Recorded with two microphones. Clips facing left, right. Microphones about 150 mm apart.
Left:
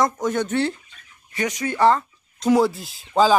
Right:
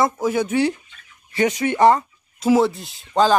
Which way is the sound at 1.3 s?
25° right (ahead or behind).